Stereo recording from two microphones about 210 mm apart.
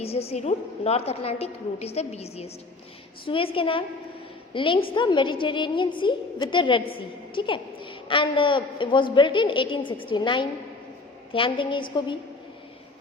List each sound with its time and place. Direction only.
0.0 s a woman's voice: 30° left (ahead or behind)